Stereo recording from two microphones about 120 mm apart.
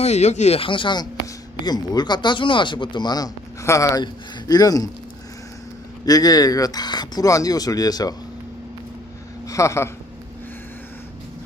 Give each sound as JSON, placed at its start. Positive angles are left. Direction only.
{"t": 0.0, "sound": "speech", "side_deg": 70}
{"t": 6.1, "sound": "speech", "side_deg": 30}
{"t": 9.5, "sound": "speech", "side_deg": 25}